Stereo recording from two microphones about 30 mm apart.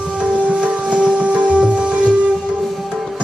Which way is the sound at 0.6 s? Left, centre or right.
Right.